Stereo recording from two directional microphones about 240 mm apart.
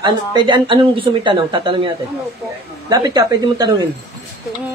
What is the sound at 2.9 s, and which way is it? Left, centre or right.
Speech, centre.